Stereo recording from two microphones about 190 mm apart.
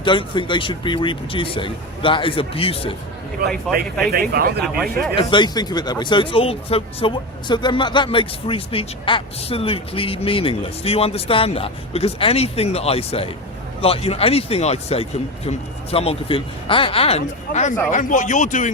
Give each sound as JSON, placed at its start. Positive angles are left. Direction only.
{"t": 0.0, "sound": "speech", "side_deg": 25}
{"t": 3.4, "sound": "speech", "side_deg": -55}
{"t": 5.1, "sound": "speech", "side_deg": 25}